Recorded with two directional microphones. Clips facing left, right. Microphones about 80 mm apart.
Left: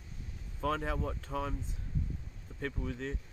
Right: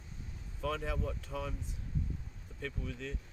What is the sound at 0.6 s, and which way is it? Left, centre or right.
Speech, left.